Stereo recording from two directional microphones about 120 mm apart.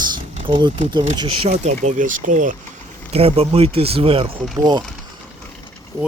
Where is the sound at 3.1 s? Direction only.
55° right (ahead or behind).